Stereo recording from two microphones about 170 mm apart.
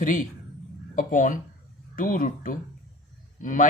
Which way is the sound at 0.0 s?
50° left (ahead or behind).